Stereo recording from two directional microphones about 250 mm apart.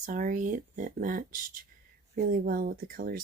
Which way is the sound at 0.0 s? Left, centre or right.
Right.